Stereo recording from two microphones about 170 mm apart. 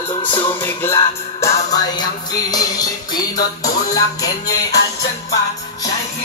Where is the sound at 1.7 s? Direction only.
20° left (ahead or behind).